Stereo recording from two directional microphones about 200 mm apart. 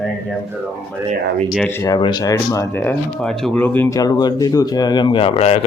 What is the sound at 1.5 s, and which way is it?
Speech, 5° left (ahead or behind).